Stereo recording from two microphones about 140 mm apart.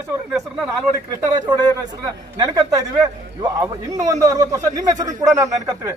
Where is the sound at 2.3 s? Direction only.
25° right (ahead or behind).